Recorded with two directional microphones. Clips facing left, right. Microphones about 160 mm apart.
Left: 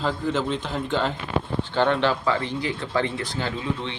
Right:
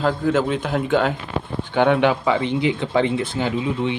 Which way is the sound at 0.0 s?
5° right (ahead or behind).